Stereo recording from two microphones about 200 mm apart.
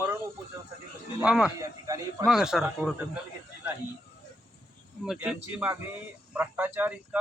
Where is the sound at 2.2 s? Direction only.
Centre (ahead or behind).